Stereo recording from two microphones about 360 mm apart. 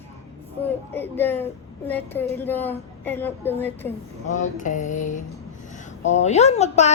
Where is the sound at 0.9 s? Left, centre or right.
Centre.